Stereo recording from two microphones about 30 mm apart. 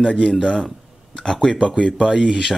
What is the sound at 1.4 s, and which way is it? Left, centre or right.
Speech, left.